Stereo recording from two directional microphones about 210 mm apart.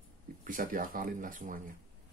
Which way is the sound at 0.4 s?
40° right (ahead or behind).